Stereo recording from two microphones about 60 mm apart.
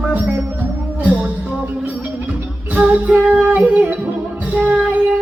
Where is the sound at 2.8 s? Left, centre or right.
Right.